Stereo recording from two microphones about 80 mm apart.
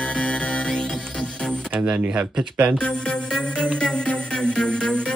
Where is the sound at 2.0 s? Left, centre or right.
Centre.